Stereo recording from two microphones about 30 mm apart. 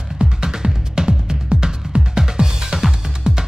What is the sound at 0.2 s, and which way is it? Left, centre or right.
Music, centre.